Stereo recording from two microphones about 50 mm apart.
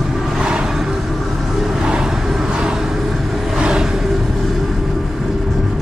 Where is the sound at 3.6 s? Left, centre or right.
Centre.